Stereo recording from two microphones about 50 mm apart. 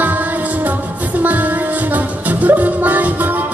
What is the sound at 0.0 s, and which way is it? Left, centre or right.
Music, right.